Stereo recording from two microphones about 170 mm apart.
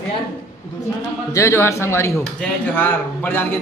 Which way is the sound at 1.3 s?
15° left (ahead or behind).